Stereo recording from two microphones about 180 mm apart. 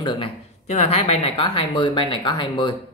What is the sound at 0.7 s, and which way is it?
Speech, 40° left (ahead or behind).